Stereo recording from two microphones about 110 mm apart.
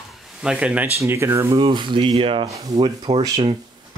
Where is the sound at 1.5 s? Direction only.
55° right (ahead or behind).